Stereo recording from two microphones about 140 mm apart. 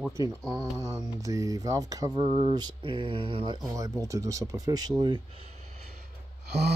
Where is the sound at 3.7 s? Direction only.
25° right (ahead or behind).